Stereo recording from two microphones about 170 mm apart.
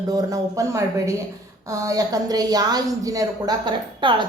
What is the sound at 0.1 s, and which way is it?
A woman's voice, 20° right (ahead or behind).